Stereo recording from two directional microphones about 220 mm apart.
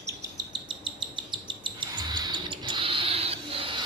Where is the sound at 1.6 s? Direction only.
20° right (ahead or behind).